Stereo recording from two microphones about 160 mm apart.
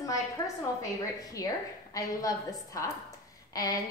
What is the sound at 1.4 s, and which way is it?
Speech, 20° left (ahead or behind).